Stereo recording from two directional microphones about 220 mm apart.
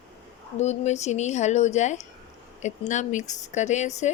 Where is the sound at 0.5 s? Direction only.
30° left (ahead or behind).